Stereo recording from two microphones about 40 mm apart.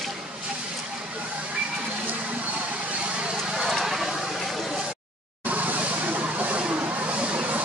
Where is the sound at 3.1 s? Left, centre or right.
Right; by 4.8 s centre.